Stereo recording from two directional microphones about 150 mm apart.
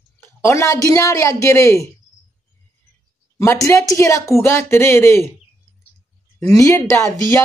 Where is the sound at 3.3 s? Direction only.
20° left (ahead or behind).